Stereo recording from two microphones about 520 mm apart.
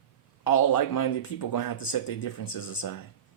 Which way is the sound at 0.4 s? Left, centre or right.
Left.